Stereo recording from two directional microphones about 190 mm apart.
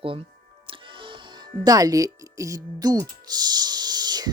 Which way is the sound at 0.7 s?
25° right (ahead or behind).